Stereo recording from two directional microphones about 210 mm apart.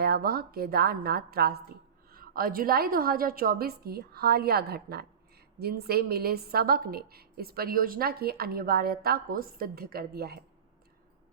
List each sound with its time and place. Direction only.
0.0 s a woman's voice: 45° right (ahead or behind)